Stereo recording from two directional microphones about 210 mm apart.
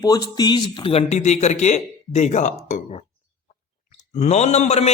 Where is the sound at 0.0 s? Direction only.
20° left (ahead or behind); by 3.0 s 35° left (ahead or behind).